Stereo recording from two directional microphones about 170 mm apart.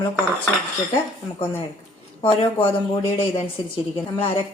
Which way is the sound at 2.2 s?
30° left (ahead or behind).